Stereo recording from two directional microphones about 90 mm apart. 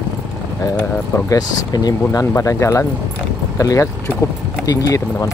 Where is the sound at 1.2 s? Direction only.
45° left (ahead or behind).